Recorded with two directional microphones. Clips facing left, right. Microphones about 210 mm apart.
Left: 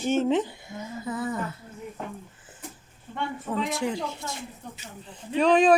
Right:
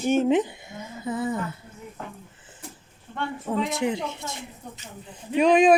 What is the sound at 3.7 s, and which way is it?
Speech, 20° right (ahead or behind).